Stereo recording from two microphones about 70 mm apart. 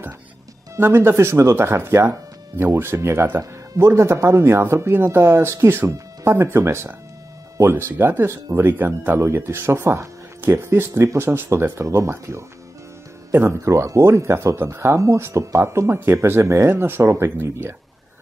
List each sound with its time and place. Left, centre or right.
0.7 s speech: right
5.9 s music: right
6.3 s speech: right